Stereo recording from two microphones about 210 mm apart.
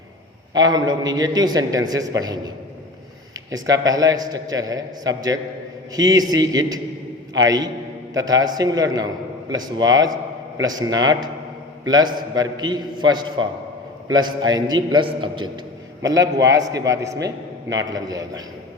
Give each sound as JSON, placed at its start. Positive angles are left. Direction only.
{"t": 0.5, "sound": "a man's voice", "side_deg": -20}
{"t": 3.8, "sound": "a man's voice", "side_deg": -15}